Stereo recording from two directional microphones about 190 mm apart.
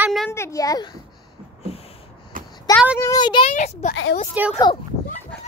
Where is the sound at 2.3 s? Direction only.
45° right (ahead or behind).